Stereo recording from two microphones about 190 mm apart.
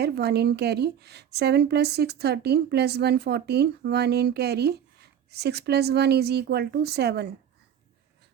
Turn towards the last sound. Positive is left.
turn(degrees=-60)  # may be behind; listen again after turning